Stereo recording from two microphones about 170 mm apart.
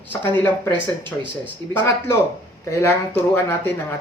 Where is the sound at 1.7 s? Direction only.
10° left (ahead or behind).